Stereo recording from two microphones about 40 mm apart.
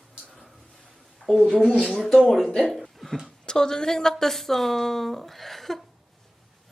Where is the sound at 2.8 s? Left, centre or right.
Centre.